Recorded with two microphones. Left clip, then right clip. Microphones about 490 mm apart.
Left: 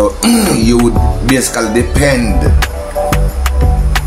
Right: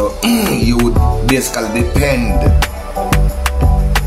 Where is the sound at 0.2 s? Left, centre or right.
Right.